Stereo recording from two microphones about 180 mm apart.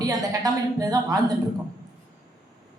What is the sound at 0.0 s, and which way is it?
A woman's voice, 20° right (ahead or behind).